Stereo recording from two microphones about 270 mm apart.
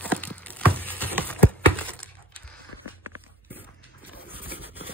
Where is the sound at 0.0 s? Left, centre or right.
Centre.